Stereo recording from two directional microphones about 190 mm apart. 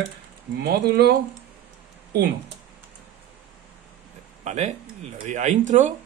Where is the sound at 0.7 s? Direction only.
55° right (ahead or behind).